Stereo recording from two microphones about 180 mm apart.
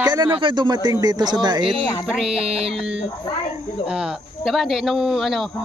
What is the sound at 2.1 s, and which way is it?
Speech, 5° right (ahead or behind).